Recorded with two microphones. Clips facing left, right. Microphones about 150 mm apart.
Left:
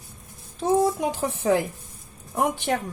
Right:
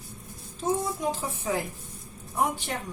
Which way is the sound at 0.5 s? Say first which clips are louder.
Left 7 dB; 60° left (ahead or behind).